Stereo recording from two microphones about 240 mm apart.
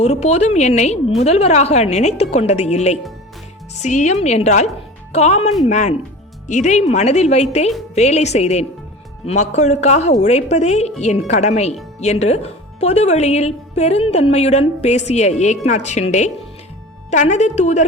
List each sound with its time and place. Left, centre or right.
0.0 s speech: left